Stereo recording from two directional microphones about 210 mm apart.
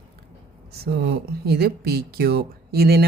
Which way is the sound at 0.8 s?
50° right (ahead or behind).